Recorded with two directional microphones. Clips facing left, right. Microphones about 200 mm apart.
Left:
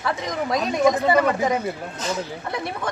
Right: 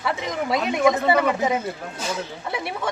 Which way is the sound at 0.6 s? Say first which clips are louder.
Left 1 dB; 5° right (ahead or behind).